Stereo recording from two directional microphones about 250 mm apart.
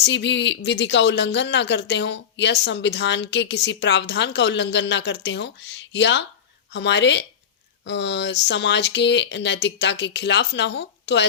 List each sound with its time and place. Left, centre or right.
0.0 s speech: left